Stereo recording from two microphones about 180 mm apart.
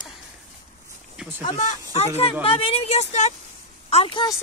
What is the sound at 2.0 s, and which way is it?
A woman's voice, 35° left (ahead or behind).